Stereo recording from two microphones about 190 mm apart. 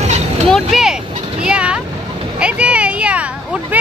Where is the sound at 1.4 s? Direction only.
5° right (ahead or behind).